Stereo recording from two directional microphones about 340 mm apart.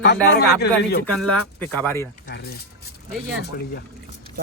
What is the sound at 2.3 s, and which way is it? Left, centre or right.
Speech, left.